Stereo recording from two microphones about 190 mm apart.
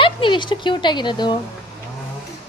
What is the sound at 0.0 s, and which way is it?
Speech, 25° left (ahead or behind).